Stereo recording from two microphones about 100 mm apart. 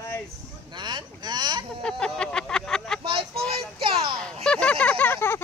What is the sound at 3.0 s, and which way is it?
Speech, 65° right (ahead or behind).